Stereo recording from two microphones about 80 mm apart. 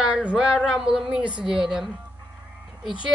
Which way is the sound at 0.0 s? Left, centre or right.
Centre.